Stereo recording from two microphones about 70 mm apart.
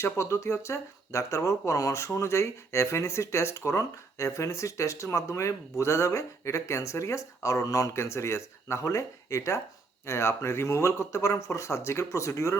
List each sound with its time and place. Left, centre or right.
0.0 s speech: left